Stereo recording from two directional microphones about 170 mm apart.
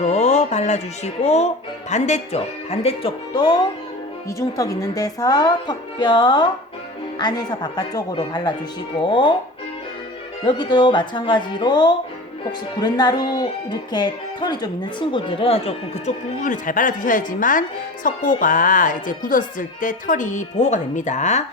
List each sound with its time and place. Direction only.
0.0 s a woman's voice: 40° left (ahead or behind)
10.4 s a woman's voice: 25° left (ahead or behind); by 21.4 s 45° left (ahead or behind)